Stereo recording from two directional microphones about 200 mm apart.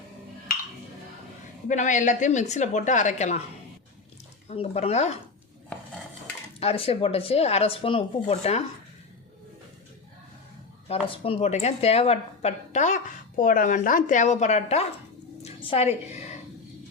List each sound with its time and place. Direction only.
1.6 s speech: 40° left (ahead or behind)
4.4 s speech: 30° left (ahead or behind)
6.6 s speech: 30° left (ahead or behind)
10.8 s speech: 30° left (ahead or behind)
15.4 s a sound: 30° left (ahead or behind)